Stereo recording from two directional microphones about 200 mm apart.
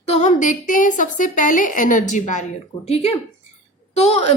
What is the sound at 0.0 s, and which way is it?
A woman's voice, 35° left (ahead or behind).